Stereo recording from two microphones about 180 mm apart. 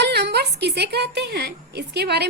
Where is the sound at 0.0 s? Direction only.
70° right (ahead or behind).